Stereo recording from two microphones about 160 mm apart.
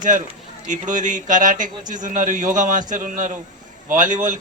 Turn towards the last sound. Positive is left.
turn(degrees=-55)  # may be behind; listen again after turning